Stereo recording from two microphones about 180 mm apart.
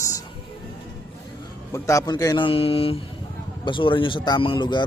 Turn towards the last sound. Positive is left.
turn(degrees=25)  # may be behind; listen again after turning